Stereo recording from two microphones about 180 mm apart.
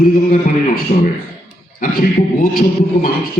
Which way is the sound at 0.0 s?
50° left (ahead or behind).